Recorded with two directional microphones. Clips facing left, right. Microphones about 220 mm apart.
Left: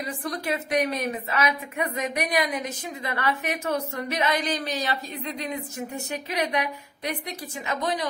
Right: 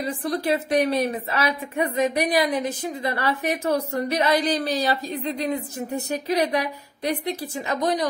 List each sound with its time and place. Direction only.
0.0 s a woman's voice: 30° right (ahead or behind)